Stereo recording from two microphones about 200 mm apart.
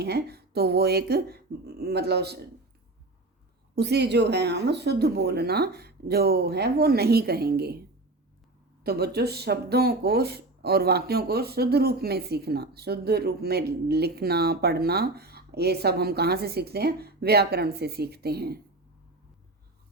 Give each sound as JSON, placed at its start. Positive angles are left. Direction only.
{"t": 0.0, "sound": "speech", "side_deg": -55}
{"t": 3.8, "sound": "speech", "side_deg": -55}
{"t": 8.8, "sound": "speech", "side_deg": -50}